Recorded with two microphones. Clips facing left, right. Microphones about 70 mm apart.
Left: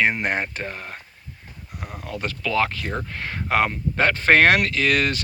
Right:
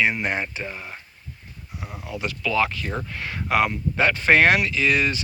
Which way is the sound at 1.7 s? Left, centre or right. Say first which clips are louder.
Left 1 dB; left.